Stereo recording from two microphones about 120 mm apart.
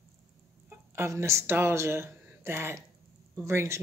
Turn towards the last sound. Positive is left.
turn(degrees=-20)  # may be behind; listen again after turning